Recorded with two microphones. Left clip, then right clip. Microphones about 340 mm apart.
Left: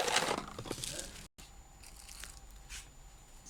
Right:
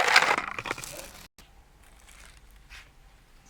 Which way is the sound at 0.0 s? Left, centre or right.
Right.